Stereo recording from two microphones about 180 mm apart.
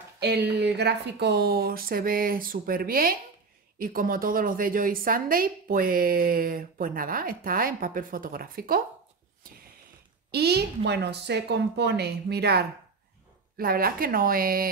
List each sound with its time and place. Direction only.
0.2 s a woman's voice: 70° right (ahead or behind)
10.3 s speech: 65° right (ahead or behind)
13.6 s a woman's voice: 55° right (ahead or behind)